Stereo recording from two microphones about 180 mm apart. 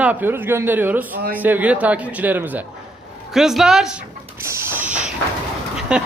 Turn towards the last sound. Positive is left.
turn(degrees=-5)  # may be behind; listen again after turning